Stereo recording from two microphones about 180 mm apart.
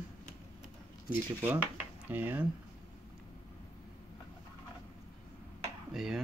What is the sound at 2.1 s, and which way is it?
Speech, 10° right (ahead or behind).